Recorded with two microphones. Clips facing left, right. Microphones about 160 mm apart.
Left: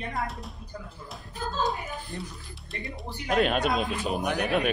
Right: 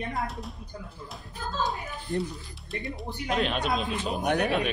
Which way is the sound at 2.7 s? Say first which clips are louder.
Right 3 dB; centre (ahead or behind).